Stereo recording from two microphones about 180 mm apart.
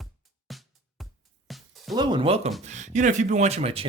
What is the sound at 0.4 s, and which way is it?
Music, centre (ahead or behind).